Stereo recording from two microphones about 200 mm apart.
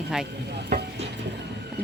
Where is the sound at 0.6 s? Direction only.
55° right (ahead or behind).